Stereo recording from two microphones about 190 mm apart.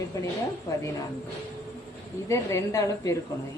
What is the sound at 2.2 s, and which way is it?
Speech, 15° left (ahead or behind).